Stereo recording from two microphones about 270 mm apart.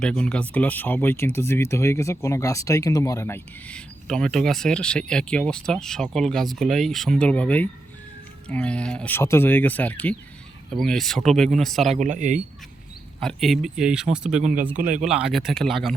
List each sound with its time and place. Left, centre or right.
0.0 s speech: centre
11.9 s speech: right
13.1 s speech: centre
14.8 s speech: right
15.0 s speech: centre